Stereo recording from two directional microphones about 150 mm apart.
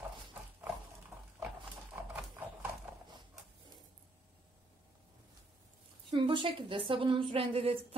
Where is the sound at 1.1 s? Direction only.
20° right (ahead or behind).